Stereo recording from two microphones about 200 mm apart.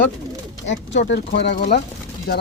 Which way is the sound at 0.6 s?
65° left (ahead or behind).